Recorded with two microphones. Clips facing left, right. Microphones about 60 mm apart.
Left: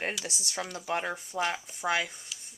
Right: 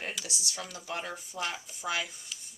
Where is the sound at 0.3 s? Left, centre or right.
Left.